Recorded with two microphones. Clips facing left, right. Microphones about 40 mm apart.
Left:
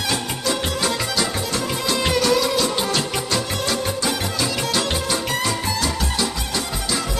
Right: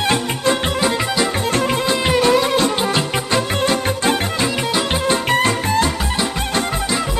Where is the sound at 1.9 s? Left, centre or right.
Right.